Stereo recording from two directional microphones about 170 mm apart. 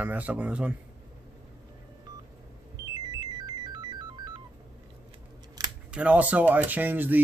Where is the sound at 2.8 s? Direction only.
25° right (ahead or behind).